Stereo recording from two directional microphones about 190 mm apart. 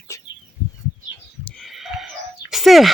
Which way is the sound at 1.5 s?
Centre (ahead or behind).